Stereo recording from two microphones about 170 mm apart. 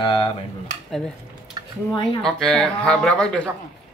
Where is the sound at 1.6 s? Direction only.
25° right (ahead or behind).